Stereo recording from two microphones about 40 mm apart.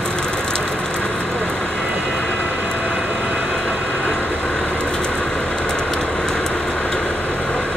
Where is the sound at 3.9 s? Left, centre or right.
Left.